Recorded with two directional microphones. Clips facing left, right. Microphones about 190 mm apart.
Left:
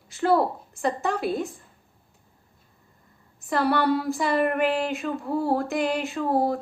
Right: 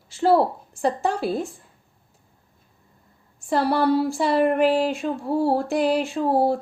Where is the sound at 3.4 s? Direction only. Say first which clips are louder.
Right 2 dB; 30° right (ahead or behind).